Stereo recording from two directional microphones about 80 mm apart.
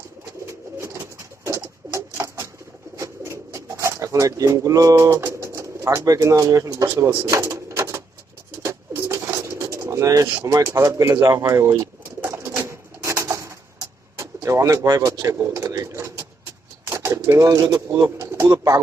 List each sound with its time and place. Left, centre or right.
0.4 s bird: right
6.0 s speech: right
8.6 s bird: right
14.2 s speech: right
15.7 s pigeon: right
16.0 s a sound: right
16.8 s pigeon: right
17.2 s speech: right
18.2 s speech: right